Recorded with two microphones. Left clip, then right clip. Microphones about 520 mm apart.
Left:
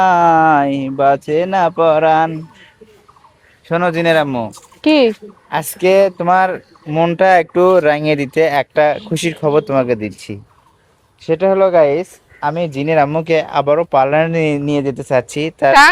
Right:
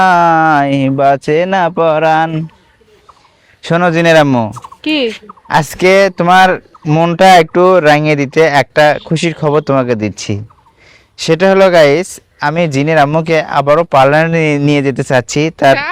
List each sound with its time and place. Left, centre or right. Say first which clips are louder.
0.0 s speech: right 2 dB; right
3.6 s speech: right 5 dB; right
4.8 s fowl: left 3 dB; left
5.5 s speech: right 5 dB; right
12.4 s speech: right 5 dB; right